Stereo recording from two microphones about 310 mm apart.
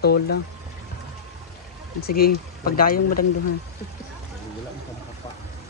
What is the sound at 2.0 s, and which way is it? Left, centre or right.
Speech, left.